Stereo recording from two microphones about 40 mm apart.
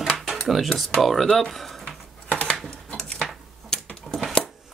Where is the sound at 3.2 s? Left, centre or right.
Centre.